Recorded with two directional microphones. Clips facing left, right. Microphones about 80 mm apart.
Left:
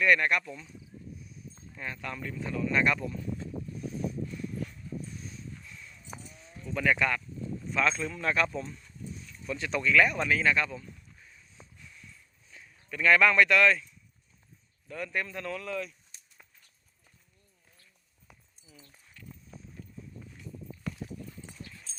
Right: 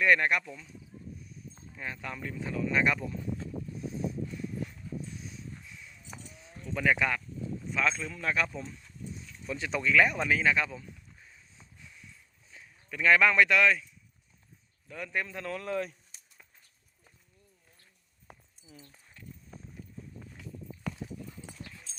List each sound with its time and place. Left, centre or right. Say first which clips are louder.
0.0 s a man's voice: even; centre
0.4 s speech: left 2 dB; centre
1.5 s speech: even; centre
3.8 s a sound: even; right
5.1 s a sound: even; centre
6.3 s sheep: even; centre
6.7 s speech: even; centre
9.1 s speech: left 1 dB; centre
11.8 s a sound: right 2 dB; centre
12.9 s a man's voice: left 1 dB; centre
15.5 s speech: right 4 dB; right
18.8 s a sound: right 2 dB; right